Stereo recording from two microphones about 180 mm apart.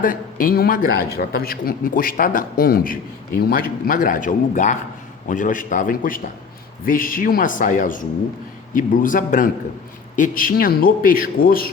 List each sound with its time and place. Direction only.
0.0 s a man's voice: 50° left (ahead or behind)